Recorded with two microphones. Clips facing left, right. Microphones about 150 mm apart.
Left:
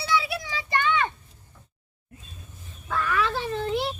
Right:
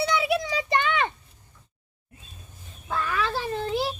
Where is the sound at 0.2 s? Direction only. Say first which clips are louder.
Right 7 dB; 20° right (ahead or behind).